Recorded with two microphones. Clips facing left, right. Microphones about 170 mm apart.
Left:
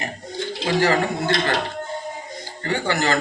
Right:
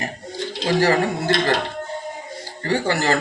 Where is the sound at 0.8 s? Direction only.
35° right (ahead or behind).